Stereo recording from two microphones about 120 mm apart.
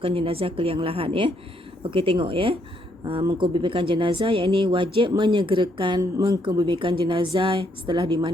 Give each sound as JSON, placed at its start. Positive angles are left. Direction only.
{"t": 0.0, "sound": "speech", "side_deg": -55}
{"t": 6.0, "sound": "a woman's voice", "side_deg": -30}
{"t": 6.4, "sound": "speech", "side_deg": -40}